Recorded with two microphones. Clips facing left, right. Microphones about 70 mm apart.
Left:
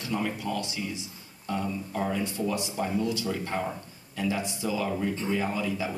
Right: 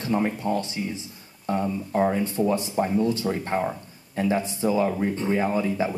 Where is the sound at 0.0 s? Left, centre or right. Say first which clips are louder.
Right 6 dB; right.